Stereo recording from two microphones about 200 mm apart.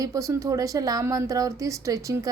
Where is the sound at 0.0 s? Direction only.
15° right (ahead or behind).